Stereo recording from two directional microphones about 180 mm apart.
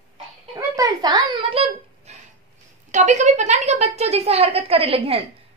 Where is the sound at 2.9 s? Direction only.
40° right (ahead or behind).